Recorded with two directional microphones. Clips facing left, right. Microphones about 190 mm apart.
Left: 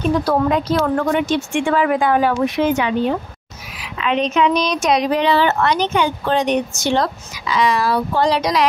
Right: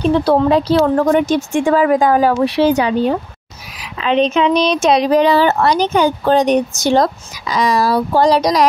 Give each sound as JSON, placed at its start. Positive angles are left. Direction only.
{"t": 0.0, "sound": "a woman's voice", "side_deg": -30}